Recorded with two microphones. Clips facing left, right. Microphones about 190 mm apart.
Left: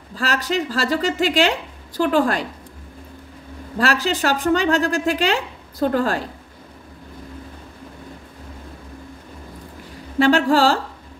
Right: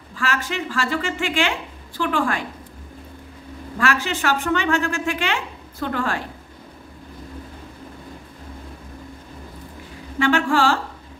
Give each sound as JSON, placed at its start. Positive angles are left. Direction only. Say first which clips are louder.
{"t": 0.1, "sound": "a woman's voice", "louder": "left 3 dB", "side_deg": 40}
{"t": 3.7, "sound": "a woman's voice", "louder": "left 3 dB", "side_deg": 35}
{"t": 10.1, "sound": "a woman's voice", "louder": "left 4 dB", "side_deg": 35}